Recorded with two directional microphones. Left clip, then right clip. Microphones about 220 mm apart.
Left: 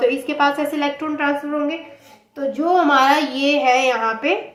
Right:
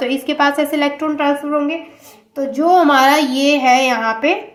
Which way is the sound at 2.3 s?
45° right (ahead or behind).